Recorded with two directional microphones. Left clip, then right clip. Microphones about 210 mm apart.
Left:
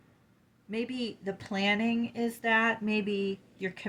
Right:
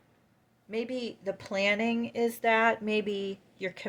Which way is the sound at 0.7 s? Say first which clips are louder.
Right 1 dB; 40° right (ahead or behind).